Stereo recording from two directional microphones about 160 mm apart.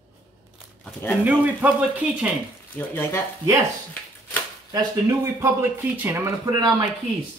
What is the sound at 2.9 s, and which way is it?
Speech, 15° left (ahead or behind).